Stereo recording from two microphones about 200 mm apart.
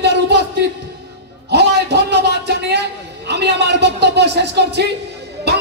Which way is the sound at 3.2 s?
55° right (ahead or behind).